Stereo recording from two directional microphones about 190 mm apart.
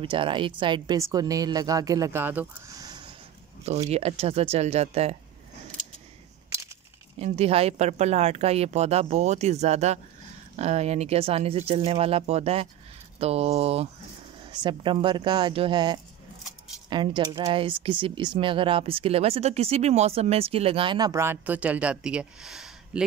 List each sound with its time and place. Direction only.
0.0 s speech: 25° right (ahead or behind)
7.2 s speech: 30° right (ahead or behind); by 23.0 s 5° right (ahead or behind)